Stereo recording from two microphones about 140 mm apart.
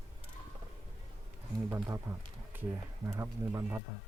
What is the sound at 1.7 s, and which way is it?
Speech, 20° right (ahead or behind).